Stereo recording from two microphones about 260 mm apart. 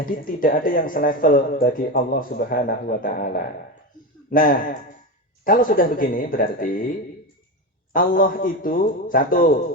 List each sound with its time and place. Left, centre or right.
0.0 s speech: left
7.9 s speech: left